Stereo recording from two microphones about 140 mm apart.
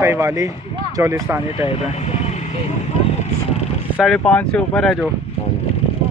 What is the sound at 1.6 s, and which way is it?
Speech, 50° left (ahead or behind).